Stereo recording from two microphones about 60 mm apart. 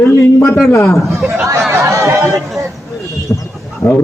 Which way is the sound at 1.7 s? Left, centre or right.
Right.